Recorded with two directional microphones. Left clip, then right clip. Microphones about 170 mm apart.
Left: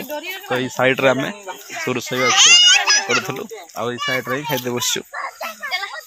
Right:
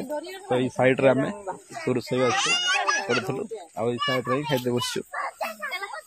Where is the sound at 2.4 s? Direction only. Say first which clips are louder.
Left 12 dB; 60° right (ahead or behind).